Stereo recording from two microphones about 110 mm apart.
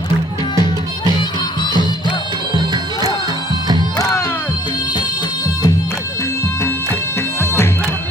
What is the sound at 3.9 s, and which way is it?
Music, 30° left (ahead or behind).